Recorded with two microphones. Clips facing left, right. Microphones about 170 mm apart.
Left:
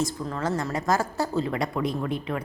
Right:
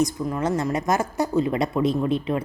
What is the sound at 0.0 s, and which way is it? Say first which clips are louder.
A woman's voice: right 5 dB; 20° right (ahead or behind).